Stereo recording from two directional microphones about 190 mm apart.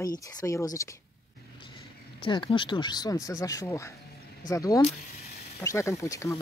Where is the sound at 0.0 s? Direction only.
20° left (ahead or behind).